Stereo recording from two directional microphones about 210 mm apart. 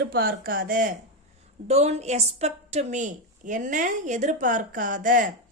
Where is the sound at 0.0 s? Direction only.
45° right (ahead or behind).